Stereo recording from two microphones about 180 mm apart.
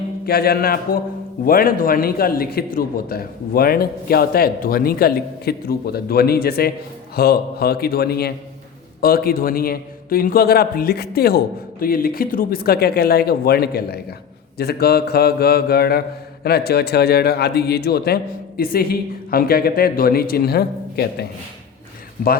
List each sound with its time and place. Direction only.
0.3 s mantra: 60° left (ahead or behind)